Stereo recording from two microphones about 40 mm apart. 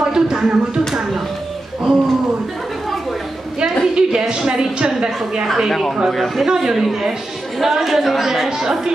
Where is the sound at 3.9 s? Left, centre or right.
Centre.